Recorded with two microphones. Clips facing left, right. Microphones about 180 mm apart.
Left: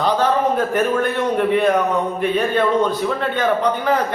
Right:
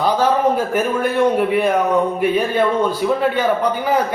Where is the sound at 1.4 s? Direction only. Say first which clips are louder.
Even; 10° right (ahead or behind).